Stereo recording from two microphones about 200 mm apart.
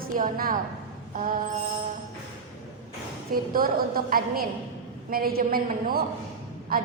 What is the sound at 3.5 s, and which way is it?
A woman's voice, 45° right (ahead or behind).